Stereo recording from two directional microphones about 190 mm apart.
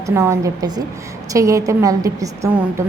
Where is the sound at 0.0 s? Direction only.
15° right (ahead or behind).